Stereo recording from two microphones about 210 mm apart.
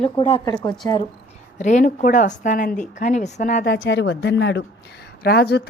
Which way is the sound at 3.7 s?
55° left (ahead or behind).